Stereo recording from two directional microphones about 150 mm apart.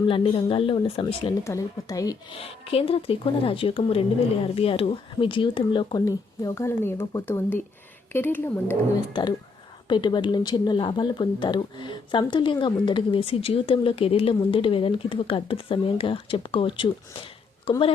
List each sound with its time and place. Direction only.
0.1 s speech: 35° left (ahead or behind)
1.5 s a woman's voice: 20° left (ahead or behind)
2.3 s speech: 40° left (ahead or behind)
6.1 s speech: 20° left (ahead or behind)
9.9 s speech: 30° left (ahead or behind)